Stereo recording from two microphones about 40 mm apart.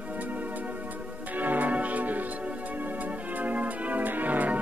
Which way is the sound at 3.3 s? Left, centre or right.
Right.